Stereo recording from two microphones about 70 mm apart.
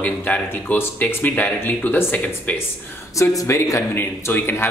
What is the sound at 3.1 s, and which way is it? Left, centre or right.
Speech, left.